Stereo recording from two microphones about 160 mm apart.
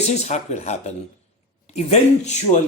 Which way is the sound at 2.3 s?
45° left (ahead or behind).